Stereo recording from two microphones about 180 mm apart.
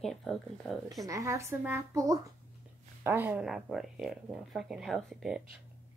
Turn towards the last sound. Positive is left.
turn(degrees=0)  # may be behind; listen again after turning